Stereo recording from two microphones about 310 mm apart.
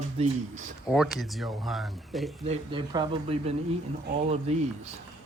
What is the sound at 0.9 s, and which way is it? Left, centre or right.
Speech, centre.